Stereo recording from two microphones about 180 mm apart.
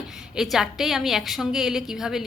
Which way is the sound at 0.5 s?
Centre (ahead or behind).